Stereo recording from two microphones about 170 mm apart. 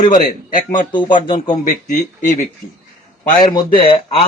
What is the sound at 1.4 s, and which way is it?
Speech, 45° left (ahead or behind).